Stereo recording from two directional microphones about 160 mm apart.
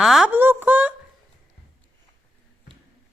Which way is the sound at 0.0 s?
Centre (ahead or behind).